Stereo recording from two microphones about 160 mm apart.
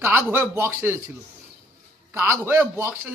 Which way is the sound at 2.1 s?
15° right (ahead or behind).